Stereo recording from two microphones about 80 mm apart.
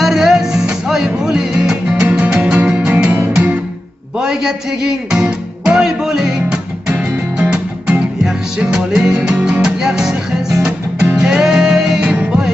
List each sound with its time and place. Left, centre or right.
0.0 s music: centre
4.2 s music: centre